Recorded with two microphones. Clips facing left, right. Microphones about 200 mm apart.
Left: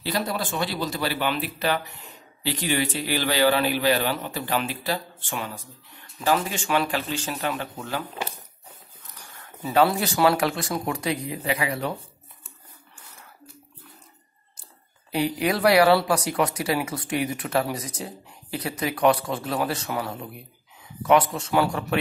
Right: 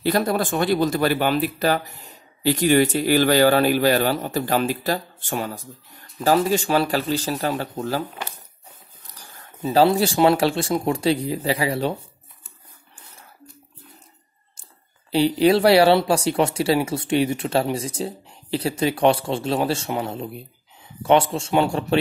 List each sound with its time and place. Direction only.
0.0 s speech: 50° right (ahead or behind); by 8.0 s 35° right (ahead or behind)
9.0 s speech: 30° right (ahead or behind)
15.0 s speech: 30° right (ahead or behind)